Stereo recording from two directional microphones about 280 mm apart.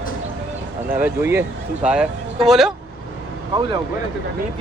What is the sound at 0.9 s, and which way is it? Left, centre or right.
Speech, centre.